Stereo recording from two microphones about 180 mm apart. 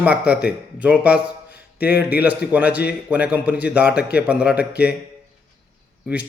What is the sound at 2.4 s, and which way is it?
Speech, 65° left (ahead or behind).